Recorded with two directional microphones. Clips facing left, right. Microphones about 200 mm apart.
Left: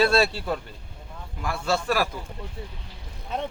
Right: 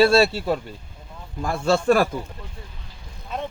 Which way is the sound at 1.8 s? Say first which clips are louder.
Right 10 dB; 50° right (ahead or behind).